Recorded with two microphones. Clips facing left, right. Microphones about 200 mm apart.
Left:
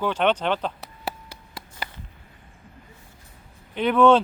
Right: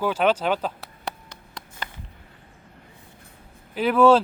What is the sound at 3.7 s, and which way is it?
Speech, 5° right (ahead or behind).